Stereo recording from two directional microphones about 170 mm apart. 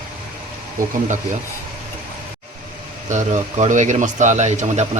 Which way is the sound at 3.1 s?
45° right (ahead or behind).